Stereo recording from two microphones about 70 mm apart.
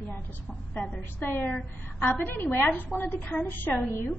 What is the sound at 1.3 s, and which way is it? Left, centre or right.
A woman's voice, left.